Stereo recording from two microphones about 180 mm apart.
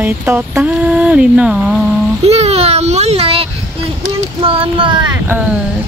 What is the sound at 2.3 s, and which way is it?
A child's voice, 35° right (ahead or behind).